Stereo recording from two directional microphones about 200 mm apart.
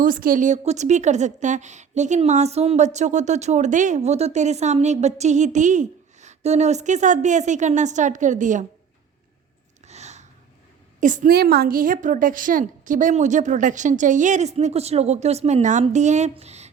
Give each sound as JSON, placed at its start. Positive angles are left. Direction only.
{"t": 0.0, "sound": "a woman's voice", "side_deg": -45}
{"t": 9.8, "sound": "a sound", "side_deg": -35}
{"t": 11.0, "sound": "a woman's voice", "side_deg": -40}